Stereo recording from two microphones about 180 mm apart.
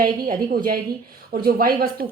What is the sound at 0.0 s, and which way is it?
A woman's voice, 55° right (ahead or behind).